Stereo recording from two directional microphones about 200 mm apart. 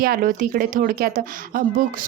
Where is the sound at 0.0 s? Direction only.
45° right (ahead or behind).